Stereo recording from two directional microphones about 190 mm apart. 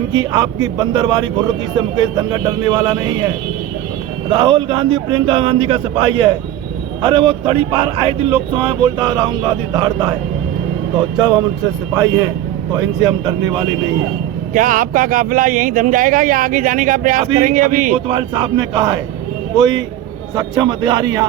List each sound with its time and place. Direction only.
0.1 s a man's voice: 20° right (ahead or behind)
4.3 s a man's voice: 25° right (ahead or behind)
11.2 s a man's voice: 20° right (ahead or behind)
13.0 s a man's voice: 20° right (ahead or behind)
14.5 s speech: 45° right (ahead or behind)
18.1 s a man's voice: 25° right (ahead or behind)